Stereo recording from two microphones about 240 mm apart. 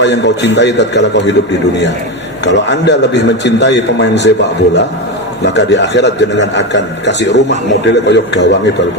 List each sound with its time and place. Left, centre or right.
0.0 s a man's voice: left
2.4 s a man's voice: left